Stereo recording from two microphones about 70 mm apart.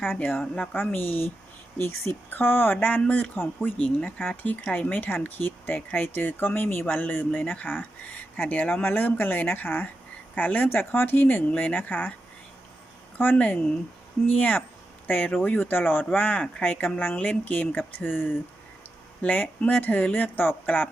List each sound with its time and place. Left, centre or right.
0.2 s speech: centre
13.1 s speech: left